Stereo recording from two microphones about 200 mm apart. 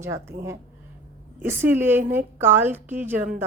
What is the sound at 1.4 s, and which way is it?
A woman's voice, 10° right (ahead or behind).